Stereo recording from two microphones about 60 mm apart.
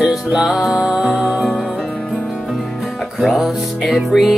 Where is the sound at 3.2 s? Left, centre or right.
Centre.